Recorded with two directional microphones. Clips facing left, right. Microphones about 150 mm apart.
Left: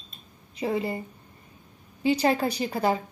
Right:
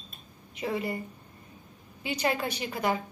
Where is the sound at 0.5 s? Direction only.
25° left (ahead or behind).